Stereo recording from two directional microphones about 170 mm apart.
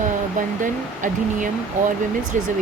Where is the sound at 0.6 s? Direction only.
50° right (ahead or behind).